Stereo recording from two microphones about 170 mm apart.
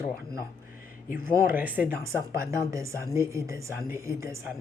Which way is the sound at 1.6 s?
10° right (ahead or behind).